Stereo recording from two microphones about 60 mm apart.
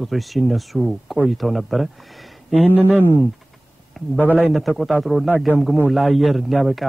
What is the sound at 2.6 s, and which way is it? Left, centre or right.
Speech, right.